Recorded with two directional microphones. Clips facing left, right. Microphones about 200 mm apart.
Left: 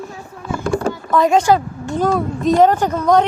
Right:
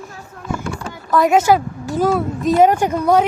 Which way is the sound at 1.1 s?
5° right (ahead or behind).